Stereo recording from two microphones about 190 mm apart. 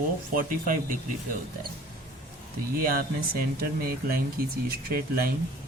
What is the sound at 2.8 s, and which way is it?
Speech, 50° right (ahead or behind).